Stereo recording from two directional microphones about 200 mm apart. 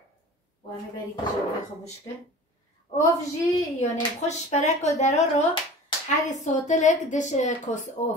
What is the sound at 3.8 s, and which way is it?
A woman's voice, 35° left (ahead or behind).